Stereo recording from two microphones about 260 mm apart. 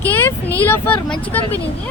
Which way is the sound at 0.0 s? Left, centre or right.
Centre.